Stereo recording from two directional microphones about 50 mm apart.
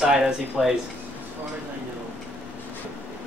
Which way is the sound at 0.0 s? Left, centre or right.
Centre.